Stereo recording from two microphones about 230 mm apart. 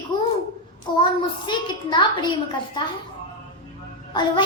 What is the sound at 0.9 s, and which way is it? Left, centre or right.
A child's voice, left.